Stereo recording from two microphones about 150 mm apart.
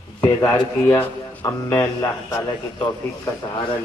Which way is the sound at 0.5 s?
20° left (ahead or behind).